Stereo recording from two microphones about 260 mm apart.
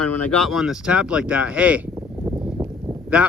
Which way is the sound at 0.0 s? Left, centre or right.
Left.